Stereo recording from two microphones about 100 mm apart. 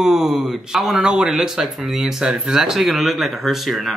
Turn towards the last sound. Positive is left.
turn(degrees=0)  # may be behind; listen again after turning